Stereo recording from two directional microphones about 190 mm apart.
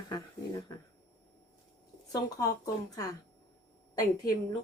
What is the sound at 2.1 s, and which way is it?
A woman's voice, 20° left (ahead or behind).